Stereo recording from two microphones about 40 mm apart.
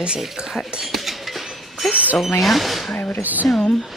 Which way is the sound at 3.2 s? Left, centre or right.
Right.